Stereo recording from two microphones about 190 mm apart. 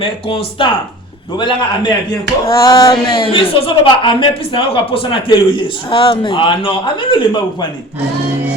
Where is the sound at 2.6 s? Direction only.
20° left (ahead or behind).